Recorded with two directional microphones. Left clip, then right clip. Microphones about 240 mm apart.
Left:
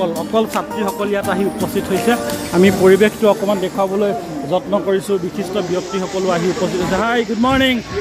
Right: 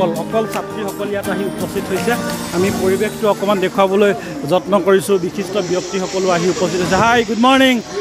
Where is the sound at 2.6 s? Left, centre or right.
Centre.